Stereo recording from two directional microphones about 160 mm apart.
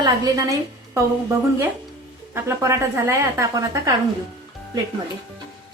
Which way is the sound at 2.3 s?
15° right (ahead or behind).